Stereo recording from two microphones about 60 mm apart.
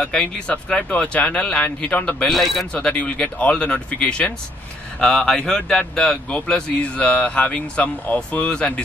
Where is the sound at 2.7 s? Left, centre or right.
Centre.